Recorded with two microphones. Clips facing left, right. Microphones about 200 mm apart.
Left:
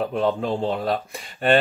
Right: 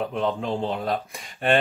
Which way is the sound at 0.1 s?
40° left (ahead or behind).